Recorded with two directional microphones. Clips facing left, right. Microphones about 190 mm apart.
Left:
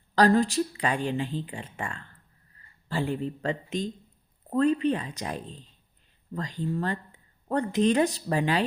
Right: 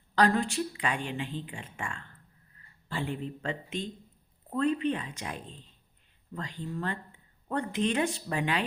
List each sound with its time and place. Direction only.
0.2 s speech: 35° left (ahead or behind)